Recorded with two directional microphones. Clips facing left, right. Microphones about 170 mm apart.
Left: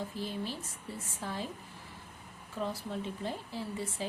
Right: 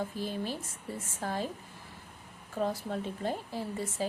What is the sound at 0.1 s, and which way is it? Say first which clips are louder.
A woman's voice: right 2 dB; 45° right (ahead or behind).